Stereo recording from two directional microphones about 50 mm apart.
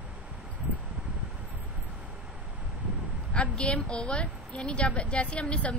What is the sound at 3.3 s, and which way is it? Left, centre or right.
A woman's voice, left.